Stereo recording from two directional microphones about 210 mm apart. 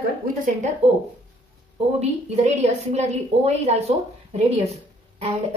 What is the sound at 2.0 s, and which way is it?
A woman's voice, 30° right (ahead or behind).